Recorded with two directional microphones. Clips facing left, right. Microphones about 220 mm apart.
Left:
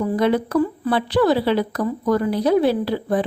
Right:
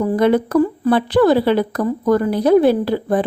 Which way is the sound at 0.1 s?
50° right (ahead or behind).